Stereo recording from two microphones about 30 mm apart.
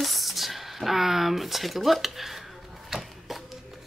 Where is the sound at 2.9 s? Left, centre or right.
Centre.